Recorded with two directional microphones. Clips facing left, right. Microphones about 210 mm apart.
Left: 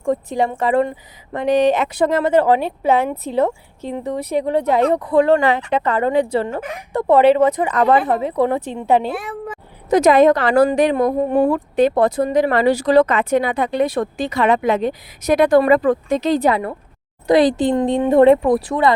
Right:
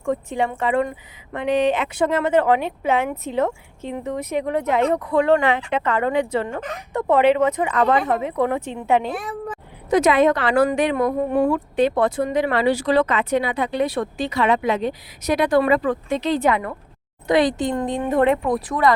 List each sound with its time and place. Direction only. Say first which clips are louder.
0.0 s speech: left 4 dB; 35° left (ahead or behind)
6.5 s speech: left 3 dB; 10° left (ahead or behind)
6.9 s speech: left 4 dB; 35° left (ahead or behind)
9.0 s speech: left 3 dB; 5° left (ahead or behind)
9.9 s speech: left 4 dB; 40° left (ahead or behind)